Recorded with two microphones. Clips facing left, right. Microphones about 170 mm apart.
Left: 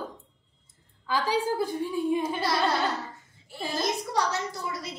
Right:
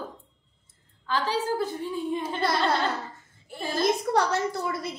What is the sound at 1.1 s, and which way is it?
A woman's voice, 10° left (ahead or behind).